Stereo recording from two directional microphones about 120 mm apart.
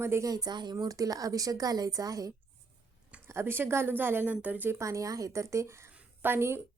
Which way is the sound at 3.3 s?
20° right (ahead or behind).